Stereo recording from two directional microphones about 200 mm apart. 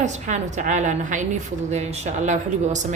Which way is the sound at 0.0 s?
35° right (ahead or behind).